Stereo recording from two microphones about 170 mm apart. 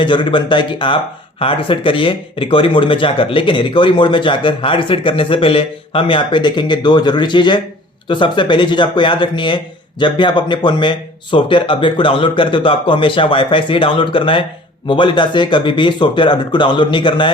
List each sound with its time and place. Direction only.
0.0 s speech: 30° left (ahead or behind)